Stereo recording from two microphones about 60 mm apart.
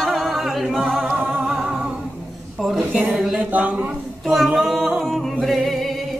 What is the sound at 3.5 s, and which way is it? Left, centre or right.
Speech, right.